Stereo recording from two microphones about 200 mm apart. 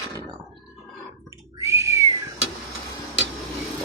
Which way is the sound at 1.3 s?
15° right (ahead or behind).